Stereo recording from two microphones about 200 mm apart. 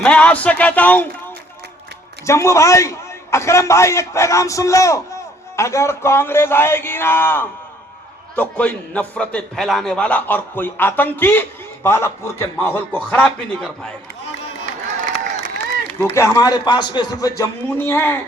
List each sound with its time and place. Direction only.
0.0 s a man's voice: 5° left (ahead or behind)
2.2 s a man's voice: 15° left (ahead or behind)
16.0 s a man's voice: 10° left (ahead or behind)